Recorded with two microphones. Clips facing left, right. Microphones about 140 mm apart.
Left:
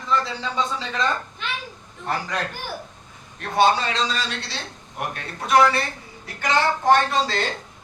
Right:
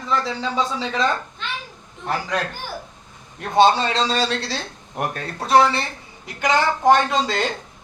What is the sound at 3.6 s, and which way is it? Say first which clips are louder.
A man's voice: right 3 dB; 30° right (ahead or behind).